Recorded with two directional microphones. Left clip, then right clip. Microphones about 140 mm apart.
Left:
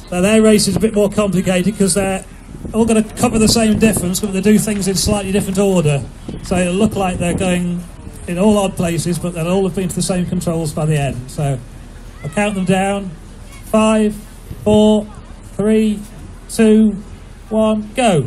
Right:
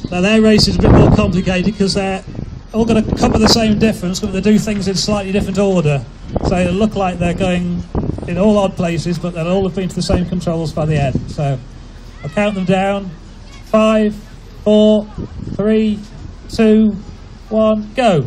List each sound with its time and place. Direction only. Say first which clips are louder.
0.1 s a man's voice: even; 30° right (ahead or behind)